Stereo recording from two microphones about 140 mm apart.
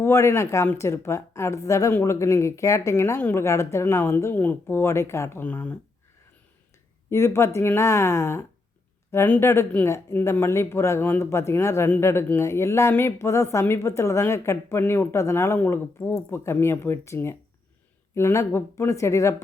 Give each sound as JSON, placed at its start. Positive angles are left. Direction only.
{"t": 0.0, "sound": "speech", "side_deg": 20}
{"t": 7.1, "sound": "speech", "side_deg": 20}